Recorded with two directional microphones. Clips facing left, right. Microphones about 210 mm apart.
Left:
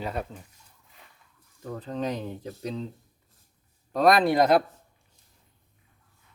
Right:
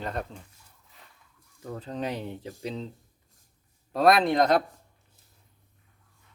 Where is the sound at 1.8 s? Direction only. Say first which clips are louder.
Left 2 dB; 10° right (ahead or behind).